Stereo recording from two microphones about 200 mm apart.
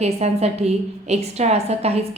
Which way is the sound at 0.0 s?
30° right (ahead or behind).